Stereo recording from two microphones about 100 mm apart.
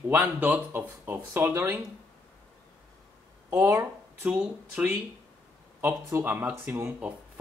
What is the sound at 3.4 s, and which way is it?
Speech, 35° right (ahead or behind).